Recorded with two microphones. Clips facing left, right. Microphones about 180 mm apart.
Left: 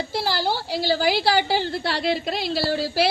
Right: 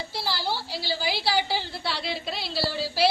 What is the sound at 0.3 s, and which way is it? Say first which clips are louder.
Speech: left 4 dB; 45° left (ahead or behind).